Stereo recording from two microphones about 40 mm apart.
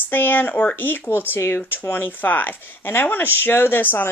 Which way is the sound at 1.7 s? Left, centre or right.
Left.